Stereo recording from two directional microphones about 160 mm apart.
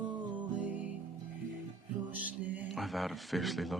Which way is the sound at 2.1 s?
10° right (ahead or behind).